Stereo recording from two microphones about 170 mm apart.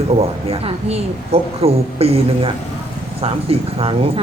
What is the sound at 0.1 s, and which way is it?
A woman's voice, 35° right (ahead or behind).